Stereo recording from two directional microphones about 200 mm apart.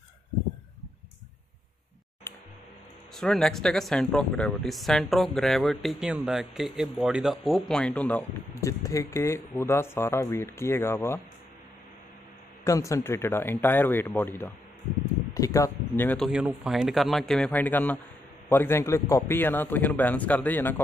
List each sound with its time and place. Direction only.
3.2 s speech: centre (ahead or behind)
12.6 s speech: 15° left (ahead or behind)
16.3 s speech: 5° right (ahead or behind)